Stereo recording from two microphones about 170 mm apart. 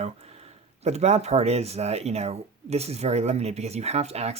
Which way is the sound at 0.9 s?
40° right (ahead or behind).